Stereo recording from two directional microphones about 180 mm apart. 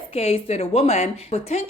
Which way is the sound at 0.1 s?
35° left (ahead or behind).